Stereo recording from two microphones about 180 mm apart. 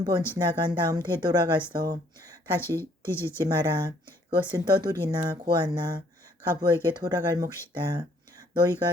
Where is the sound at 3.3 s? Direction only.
20° right (ahead or behind).